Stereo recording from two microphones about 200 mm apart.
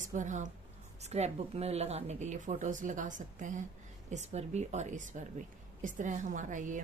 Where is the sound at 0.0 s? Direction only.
40° right (ahead or behind).